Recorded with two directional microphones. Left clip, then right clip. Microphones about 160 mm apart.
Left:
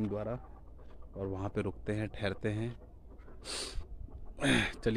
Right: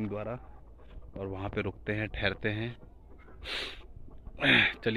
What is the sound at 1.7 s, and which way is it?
Speech, 5° left (ahead or behind).